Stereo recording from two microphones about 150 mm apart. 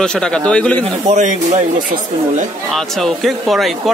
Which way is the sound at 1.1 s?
55° right (ahead or behind).